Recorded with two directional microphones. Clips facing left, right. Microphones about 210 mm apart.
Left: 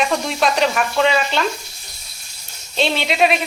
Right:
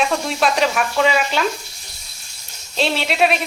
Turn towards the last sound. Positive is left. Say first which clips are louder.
# left 1 dB
turn(degrees=0)  # may be behind; listen again after turning